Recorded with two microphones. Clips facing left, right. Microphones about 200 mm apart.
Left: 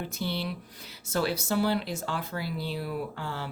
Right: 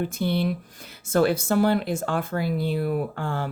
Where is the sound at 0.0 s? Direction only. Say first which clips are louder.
Right 8 dB; 50° right (ahead or behind).